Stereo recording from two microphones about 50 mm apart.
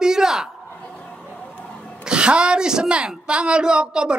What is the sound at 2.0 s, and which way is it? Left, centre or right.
A woman's voice, centre.